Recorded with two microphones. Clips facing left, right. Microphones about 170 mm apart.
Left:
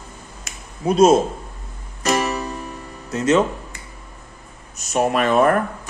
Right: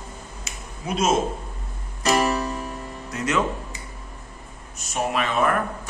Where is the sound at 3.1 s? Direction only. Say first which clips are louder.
Left 9 dB; 25° left (ahead or behind).